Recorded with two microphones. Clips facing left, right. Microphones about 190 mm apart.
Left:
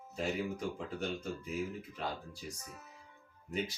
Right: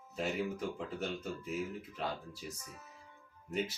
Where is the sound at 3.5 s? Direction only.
Centre (ahead or behind).